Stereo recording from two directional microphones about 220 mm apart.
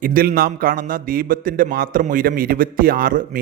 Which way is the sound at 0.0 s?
40° right (ahead or behind).